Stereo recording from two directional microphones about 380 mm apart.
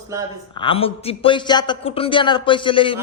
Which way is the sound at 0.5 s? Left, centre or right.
Centre.